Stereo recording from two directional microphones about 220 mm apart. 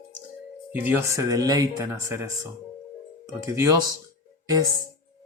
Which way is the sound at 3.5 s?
15° right (ahead or behind).